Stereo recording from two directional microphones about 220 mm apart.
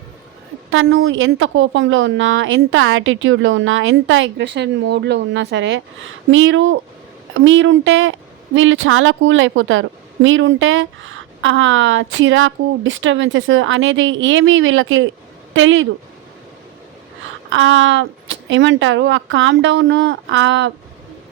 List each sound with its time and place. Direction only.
0.7 s a woman's voice: 65° right (ahead or behind)
17.5 s a woman's voice: 60° right (ahead or behind)